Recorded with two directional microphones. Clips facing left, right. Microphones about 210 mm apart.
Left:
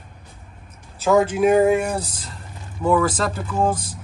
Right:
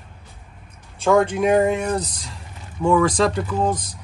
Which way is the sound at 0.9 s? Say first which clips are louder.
Even; 5° left (ahead or behind).